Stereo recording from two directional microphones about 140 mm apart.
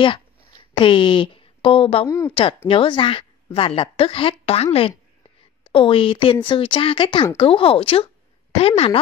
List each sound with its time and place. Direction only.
0.0 s a sound: 35° left (ahead or behind)
2.0 s speech: 20° left (ahead or behind)
2.7 s a woman's voice: 40° left (ahead or behind)